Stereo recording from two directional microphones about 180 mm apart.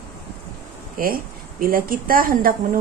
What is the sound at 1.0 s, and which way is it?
Speech, 50° right (ahead or behind).